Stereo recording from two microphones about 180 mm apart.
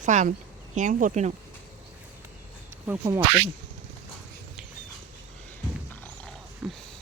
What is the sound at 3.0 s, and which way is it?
Speech, 15° right (ahead or behind).